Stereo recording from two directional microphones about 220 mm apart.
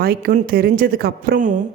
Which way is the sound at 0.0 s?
40° right (ahead or behind).